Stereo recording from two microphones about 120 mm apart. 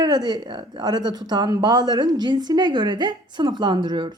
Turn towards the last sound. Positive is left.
turn(degrees=-35)  # may be behind; listen again after turning